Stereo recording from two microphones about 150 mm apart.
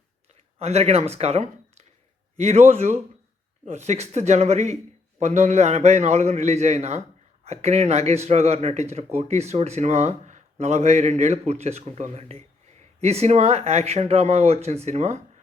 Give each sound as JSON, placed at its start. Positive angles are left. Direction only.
{"t": 0.6, "sound": "a man's voice", "side_deg": -45}